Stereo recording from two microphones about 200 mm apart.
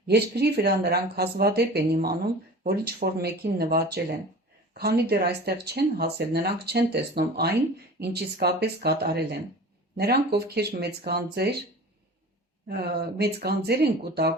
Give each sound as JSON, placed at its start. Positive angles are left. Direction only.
{"t": 0.1, "sound": "speech", "side_deg": -55}
{"t": 12.6, "sound": "speech", "side_deg": -50}